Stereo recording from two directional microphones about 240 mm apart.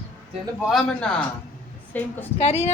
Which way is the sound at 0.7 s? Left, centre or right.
Centre.